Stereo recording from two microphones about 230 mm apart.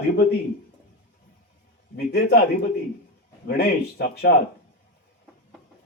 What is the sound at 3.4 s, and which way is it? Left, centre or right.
Speech, left.